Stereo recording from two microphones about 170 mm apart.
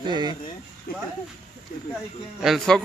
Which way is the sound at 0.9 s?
60° left (ahead or behind).